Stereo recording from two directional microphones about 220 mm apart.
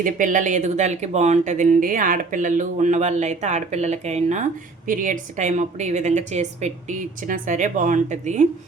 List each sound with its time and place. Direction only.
0.0 s speech: 35° right (ahead or behind)